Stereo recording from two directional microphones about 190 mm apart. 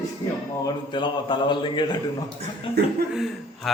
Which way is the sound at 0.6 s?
25° left (ahead or behind).